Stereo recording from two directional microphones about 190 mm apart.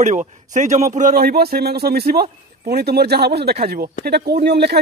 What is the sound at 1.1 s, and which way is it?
Speech, 55° right (ahead or behind).